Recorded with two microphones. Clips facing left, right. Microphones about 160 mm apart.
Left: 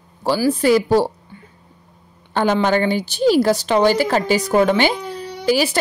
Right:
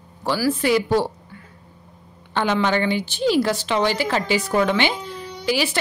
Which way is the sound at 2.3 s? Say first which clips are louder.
Left 4 dB; 40° left (ahead or behind).